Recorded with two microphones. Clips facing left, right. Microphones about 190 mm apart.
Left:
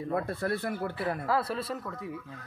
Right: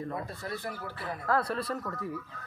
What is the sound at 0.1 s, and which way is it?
Speech, 55° left (ahead or behind).